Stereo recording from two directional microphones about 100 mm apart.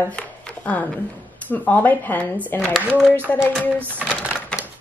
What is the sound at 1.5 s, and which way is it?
Speech, 15° left (ahead or behind).